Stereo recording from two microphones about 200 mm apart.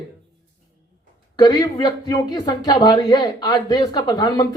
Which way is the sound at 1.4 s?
20° left (ahead or behind).